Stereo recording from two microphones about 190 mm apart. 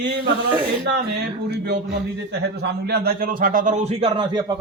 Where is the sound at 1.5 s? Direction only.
60° right (ahead or behind).